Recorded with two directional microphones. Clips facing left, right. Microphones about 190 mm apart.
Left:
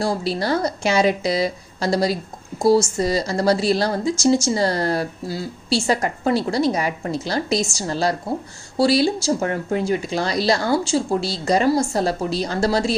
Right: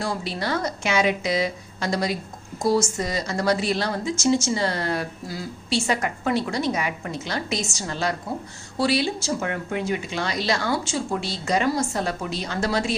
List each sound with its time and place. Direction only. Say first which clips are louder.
0.0 s a woman's voice: left 5 dB; 35° left (ahead or behind)